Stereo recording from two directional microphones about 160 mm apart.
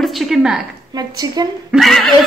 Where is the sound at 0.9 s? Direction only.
25° right (ahead or behind).